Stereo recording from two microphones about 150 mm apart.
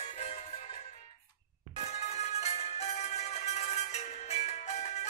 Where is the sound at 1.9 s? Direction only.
45° left (ahead or behind).